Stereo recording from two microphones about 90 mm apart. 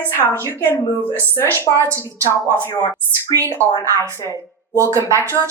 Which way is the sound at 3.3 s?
40° right (ahead or behind).